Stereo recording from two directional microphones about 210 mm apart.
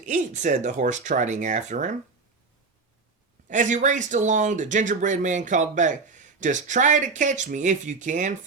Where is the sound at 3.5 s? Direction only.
35° right (ahead or behind).